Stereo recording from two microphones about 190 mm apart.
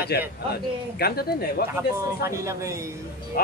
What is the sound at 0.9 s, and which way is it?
Speech, 55° left (ahead or behind).